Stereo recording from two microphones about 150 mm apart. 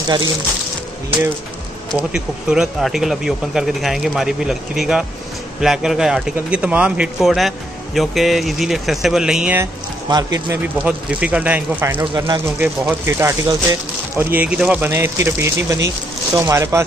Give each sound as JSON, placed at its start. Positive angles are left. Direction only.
{"t": 2.0, "sound": "speech", "side_deg": -5}
{"t": 10.0, "sound": "speech", "side_deg": -25}
{"t": 10.8, "sound": "speech", "side_deg": -10}
{"t": 14.3, "sound": "speech", "side_deg": -10}